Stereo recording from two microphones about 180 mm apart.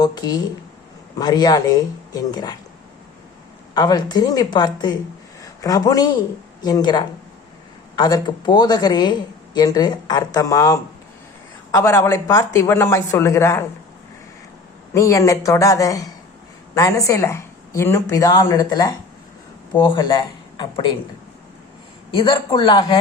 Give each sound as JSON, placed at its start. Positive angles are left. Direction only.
{"t": 0.0, "sound": "speech", "side_deg": 20}
{"t": 3.8, "sound": "a woman's voice", "side_deg": 20}
{"t": 14.9, "sound": "a woman's voice", "side_deg": 15}
{"t": 22.1, "sound": "speech", "side_deg": 25}